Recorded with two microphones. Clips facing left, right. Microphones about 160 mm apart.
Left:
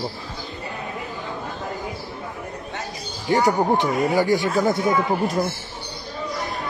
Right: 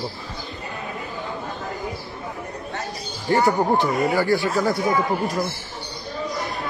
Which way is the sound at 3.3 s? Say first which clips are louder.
Even; 15° left (ahead or behind).